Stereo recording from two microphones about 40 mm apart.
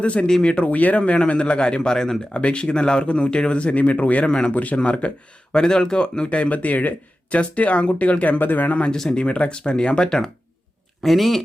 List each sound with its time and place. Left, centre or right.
0.0 s speech: left
5.5 s speech: centre; by 8.9 s left
8.9 s speech: centre
9.1 s speech: left
11.0 s speech: centre